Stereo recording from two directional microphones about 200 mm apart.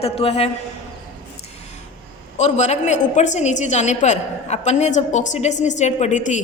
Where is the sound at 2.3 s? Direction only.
35° left (ahead or behind).